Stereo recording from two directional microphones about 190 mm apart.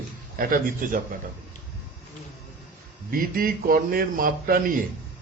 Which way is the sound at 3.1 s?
50° right (ahead or behind).